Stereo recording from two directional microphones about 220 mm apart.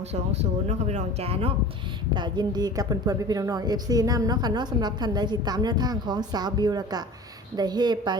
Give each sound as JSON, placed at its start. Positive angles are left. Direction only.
{"t": 0.1, "sound": "a woman's voice", "side_deg": -30}